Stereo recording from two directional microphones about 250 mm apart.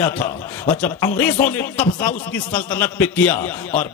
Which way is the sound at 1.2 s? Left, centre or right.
Centre.